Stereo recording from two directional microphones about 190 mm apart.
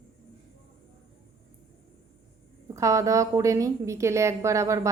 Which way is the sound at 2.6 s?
15° right (ahead or behind).